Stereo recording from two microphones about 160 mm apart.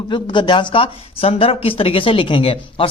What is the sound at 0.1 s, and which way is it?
Speech, 30° left (ahead or behind).